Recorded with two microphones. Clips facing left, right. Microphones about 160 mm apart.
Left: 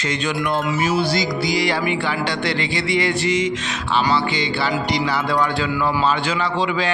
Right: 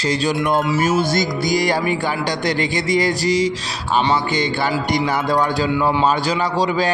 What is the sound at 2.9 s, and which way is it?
Music, 40° right (ahead or behind).